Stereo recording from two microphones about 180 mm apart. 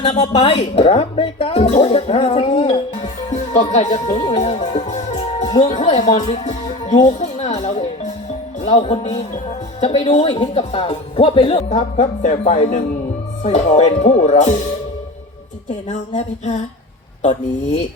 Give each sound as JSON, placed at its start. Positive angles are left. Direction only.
{"t": 0.0, "sound": "speech", "side_deg": 30}
{"t": 3.3, "sound": "speech", "side_deg": 40}
{"t": 6.5, "sound": "music", "side_deg": 40}
{"t": 8.6, "sound": "speech", "side_deg": 35}
{"t": 15.9, "sound": "speech", "side_deg": 40}